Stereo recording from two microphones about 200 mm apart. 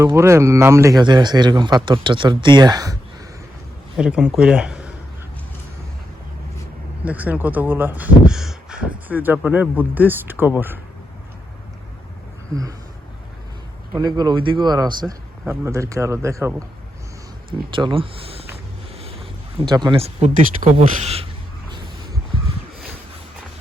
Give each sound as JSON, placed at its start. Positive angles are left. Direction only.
{"t": 0.2, "sound": "a man's voice", "side_deg": -15}
{"t": 3.9, "sound": "a man's voice", "side_deg": -5}
{"t": 7.0, "sound": "speech", "side_deg": -5}
{"t": 14.0, "sound": "speech", "side_deg": -20}
{"t": 17.7, "sound": "speech", "side_deg": -25}